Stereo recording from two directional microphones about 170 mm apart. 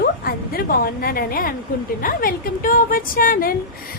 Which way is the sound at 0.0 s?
60° left (ahead or behind).